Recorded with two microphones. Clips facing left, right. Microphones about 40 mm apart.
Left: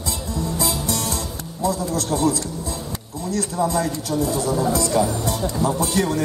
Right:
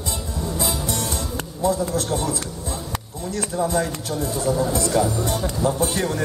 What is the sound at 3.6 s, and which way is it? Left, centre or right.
A man's voice, right.